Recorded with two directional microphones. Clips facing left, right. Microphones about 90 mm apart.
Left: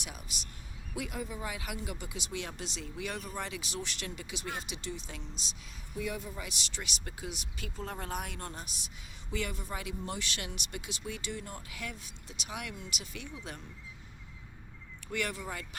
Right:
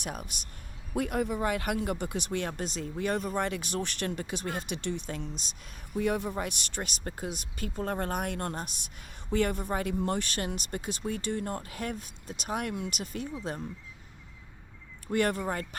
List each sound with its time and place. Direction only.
0.0 s speech: 50° right (ahead or behind)
6.0 s speech: 60° right (ahead or behind); by 13.6 s 35° right (ahead or behind)
15.0 s speech: 45° right (ahead or behind)